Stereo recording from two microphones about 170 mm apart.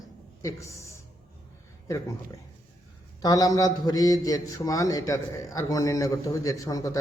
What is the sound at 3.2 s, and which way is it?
A man's voice, 20° left (ahead or behind).